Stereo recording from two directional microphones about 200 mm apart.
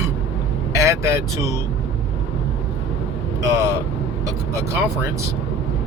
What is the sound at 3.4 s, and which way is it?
Speech, 15° right (ahead or behind).